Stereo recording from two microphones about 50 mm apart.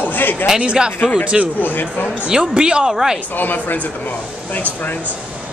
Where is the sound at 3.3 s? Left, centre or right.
Left.